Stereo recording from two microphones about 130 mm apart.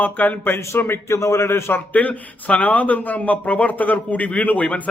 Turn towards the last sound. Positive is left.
turn(degrees=10)  # may be behind; listen again after turning